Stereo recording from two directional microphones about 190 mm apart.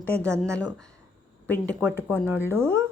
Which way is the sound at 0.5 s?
5° left (ahead or behind).